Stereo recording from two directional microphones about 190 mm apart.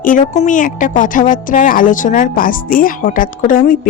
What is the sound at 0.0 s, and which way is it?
Speech, 45° left (ahead or behind).